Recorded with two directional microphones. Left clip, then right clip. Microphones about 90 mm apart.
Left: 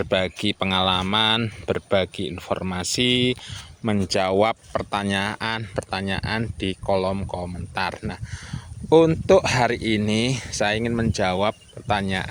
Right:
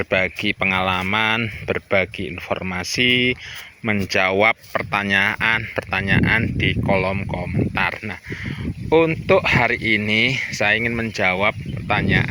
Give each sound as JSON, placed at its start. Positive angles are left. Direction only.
{"t": 0.1, "sound": "speech", "side_deg": 20}
{"t": 8.9, "sound": "speech", "side_deg": 50}